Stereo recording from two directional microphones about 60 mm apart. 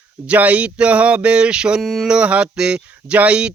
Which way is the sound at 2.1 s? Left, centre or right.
Centre.